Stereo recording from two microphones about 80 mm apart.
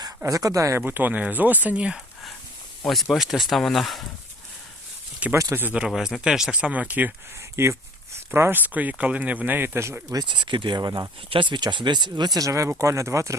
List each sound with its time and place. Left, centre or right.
0.3 s speech: right
0.8 s speech: right
2.8 s speech: centre
5.3 s speech: right
5.6 s speech: centre
7.5 s speech: right
10.2 s speech: right
10.8 s speech: right
11.3 s speech: right
12.4 s speech: right